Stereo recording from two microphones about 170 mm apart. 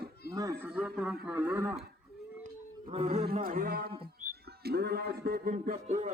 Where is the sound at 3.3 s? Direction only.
55° right (ahead or behind).